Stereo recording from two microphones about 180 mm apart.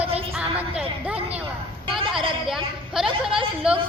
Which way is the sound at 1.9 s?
Centre (ahead or behind).